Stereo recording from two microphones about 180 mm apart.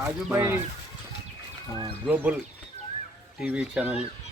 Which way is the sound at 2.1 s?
10° right (ahead or behind).